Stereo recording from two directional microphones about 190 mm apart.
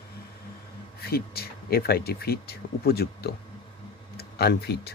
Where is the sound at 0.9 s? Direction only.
55° left (ahead or behind).